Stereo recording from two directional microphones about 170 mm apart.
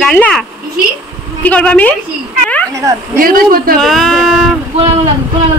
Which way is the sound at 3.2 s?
60° right (ahead or behind).